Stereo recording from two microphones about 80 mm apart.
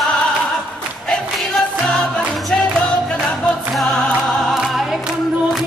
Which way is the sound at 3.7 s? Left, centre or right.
Centre.